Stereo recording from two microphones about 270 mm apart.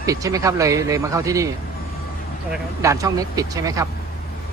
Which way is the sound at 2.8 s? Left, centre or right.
Centre.